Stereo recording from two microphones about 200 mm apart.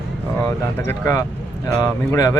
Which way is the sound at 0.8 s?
15° left (ahead or behind).